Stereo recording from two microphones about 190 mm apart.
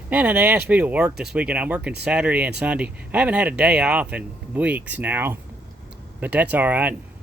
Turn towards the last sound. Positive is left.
turn(degrees=-10)  # may be behind; listen again after turning